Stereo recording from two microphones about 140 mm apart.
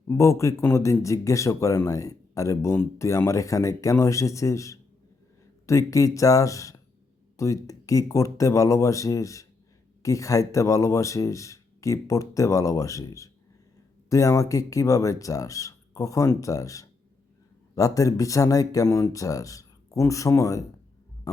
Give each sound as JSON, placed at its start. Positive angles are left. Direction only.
{"t": 0.1, "sound": "speech", "side_deg": 20}